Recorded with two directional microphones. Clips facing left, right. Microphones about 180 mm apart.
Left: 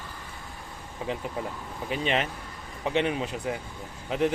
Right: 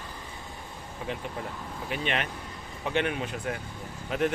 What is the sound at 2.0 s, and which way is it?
Speech, 30° left (ahead or behind).